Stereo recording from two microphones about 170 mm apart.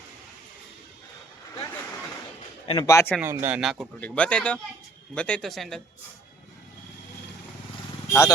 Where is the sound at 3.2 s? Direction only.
10° right (ahead or behind).